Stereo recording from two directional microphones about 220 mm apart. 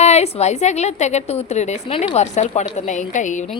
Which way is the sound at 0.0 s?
30° left (ahead or behind).